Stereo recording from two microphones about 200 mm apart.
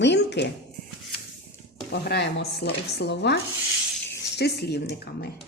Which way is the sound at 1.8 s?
55° left (ahead or behind).